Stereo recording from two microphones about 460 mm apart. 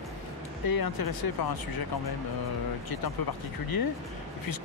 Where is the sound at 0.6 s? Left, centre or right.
Left.